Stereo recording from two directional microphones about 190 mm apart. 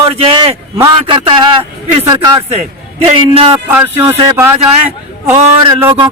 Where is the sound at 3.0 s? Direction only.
30° right (ahead or behind).